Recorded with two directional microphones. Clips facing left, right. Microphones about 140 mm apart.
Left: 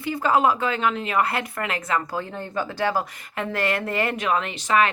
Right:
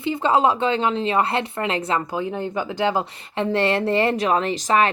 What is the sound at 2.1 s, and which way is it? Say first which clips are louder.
Speech: right 4 dB; 15° right (ahead or behind).